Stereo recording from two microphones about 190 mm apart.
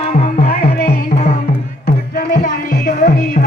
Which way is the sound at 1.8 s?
50° left (ahead or behind).